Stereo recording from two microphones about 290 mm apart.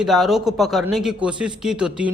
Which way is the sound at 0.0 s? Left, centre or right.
Centre.